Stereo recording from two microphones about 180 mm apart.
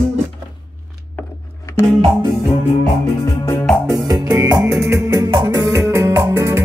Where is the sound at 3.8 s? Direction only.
20° right (ahead or behind).